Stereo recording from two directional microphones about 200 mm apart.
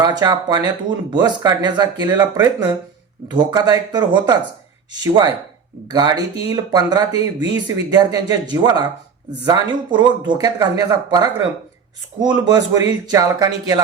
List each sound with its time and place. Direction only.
0.0 s speech: 20° right (ahead or behind)